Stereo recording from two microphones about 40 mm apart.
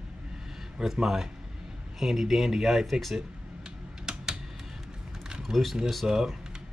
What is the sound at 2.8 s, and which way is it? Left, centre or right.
Speech, centre.